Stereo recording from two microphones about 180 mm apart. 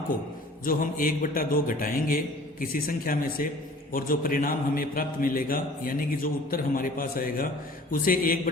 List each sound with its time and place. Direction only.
0.6 s a man's voice: 50° left (ahead or behind)